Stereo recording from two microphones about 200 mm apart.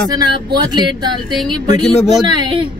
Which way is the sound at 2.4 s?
25° right (ahead or behind).